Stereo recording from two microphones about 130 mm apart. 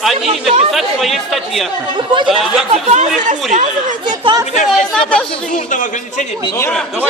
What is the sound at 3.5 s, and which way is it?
Speech, 75° right (ahead or behind).